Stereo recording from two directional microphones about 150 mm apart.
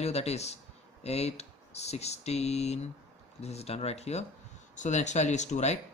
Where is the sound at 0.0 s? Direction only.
45° left (ahead or behind).